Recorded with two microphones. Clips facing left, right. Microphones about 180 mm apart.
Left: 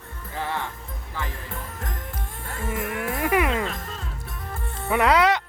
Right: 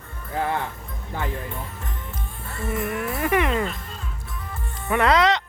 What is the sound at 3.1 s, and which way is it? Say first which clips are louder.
Music: even; 10° left (ahead or behind).